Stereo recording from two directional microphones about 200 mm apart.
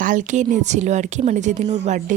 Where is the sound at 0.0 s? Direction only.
40° right (ahead or behind).